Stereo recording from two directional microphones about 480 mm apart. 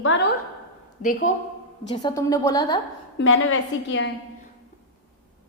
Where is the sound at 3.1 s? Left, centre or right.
Left.